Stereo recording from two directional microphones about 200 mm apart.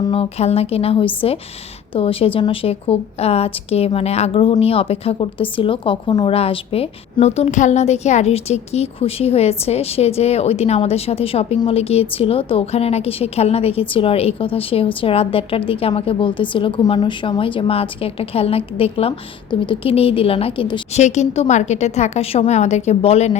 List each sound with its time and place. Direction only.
0.1 s a woman's voice: 30° left (ahead or behind)